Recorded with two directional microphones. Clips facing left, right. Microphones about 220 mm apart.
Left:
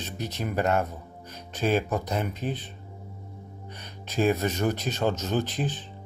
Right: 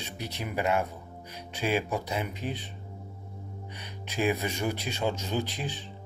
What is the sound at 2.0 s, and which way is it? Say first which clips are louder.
Speech: left 3 dB; 45° left (ahead or behind).